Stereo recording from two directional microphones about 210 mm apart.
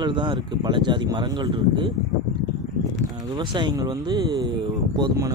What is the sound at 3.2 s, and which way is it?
Speech, 20° right (ahead or behind).